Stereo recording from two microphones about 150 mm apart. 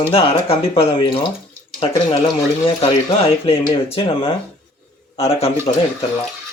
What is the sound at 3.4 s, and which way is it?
Speech, 35° left (ahead or behind).